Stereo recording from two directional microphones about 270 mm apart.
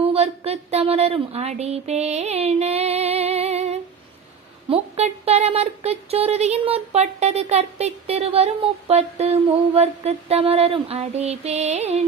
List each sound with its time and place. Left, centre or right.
0.0 s speech: right